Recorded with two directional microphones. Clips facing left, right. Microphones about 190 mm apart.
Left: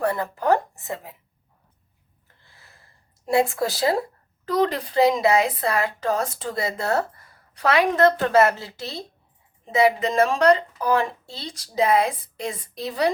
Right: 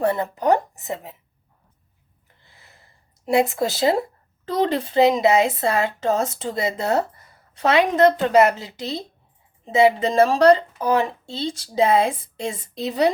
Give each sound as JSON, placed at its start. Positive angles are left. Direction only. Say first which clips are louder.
{"t": 0.0, "sound": "speech", "louder": "right 3 dB", "side_deg": -20}
{"t": 2.2, "sound": "a woman's voice", "louder": "right 1 dB", "side_deg": -20}